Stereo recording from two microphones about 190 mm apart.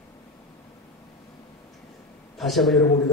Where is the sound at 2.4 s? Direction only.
Centre (ahead or behind).